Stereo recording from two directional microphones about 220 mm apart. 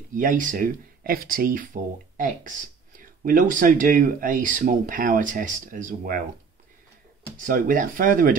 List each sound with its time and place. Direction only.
0.1 s speech: 40° right (ahead or behind)
7.3 s speech: 40° right (ahead or behind)